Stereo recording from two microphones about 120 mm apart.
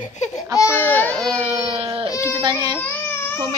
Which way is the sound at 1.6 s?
55° right (ahead or behind).